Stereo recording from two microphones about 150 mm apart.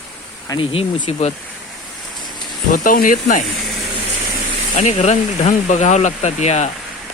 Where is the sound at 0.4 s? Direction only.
30° left (ahead or behind).